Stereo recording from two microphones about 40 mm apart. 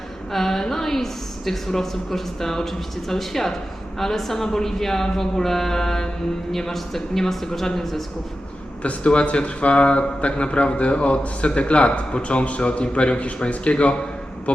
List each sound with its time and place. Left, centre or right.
0.3 s a woman's voice: centre
9.0 s a man's voice: left